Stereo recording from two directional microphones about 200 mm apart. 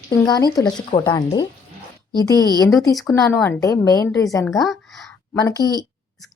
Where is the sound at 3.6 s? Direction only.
15° left (ahead or behind).